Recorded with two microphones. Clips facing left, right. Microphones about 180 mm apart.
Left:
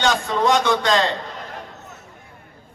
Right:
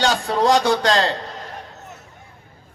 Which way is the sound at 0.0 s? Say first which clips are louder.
Right 1 dB; 35° right (ahead or behind).